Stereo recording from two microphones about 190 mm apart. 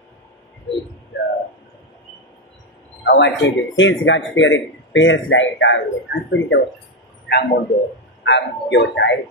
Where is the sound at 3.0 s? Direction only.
65° left (ahead or behind).